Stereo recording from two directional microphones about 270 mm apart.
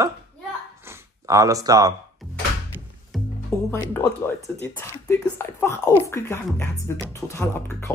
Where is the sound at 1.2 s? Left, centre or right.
Centre.